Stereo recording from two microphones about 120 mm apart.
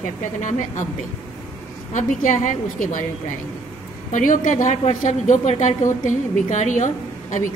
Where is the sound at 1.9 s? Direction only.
90° left.